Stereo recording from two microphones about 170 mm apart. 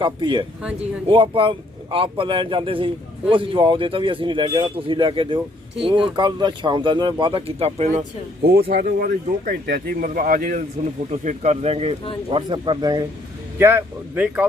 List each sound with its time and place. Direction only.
0.0 s a man's voice: 30° right (ahead or behind)
8.4 s speech: 65° right (ahead or behind)
11.2 s a man's voice: 45° right (ahead or behind); by 14.4 s 10° right (ahead or behind)